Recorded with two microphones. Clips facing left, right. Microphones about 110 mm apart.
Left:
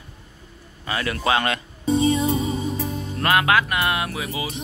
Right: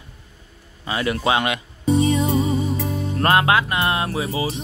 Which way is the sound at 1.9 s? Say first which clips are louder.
Right 1 dB; 30° left (ahead or behind).